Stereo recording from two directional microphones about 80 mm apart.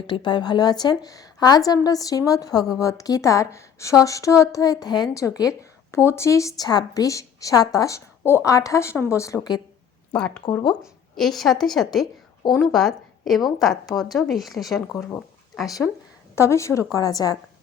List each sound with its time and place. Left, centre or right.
0.1 s a woman's voice: left
5.1 s a woman's voice: left
5.9 s a woman's voice: left
6.7 s a woman's voice: left
10.1 s speech: centre
11.2 s a woman's voice: centre
15.8 s a woman's voice: centre
16.3 s a woman's voice: left